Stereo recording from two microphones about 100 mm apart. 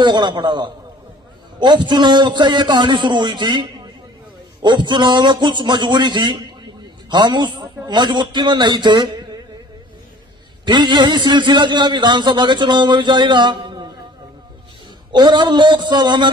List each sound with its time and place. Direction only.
0.0 s a man's voice: 50° right (ahead or behind)
10.6 s a man's voice: 50° right (ahead or behind)
15.1 s a man's voice: 50° right (ahead or behind)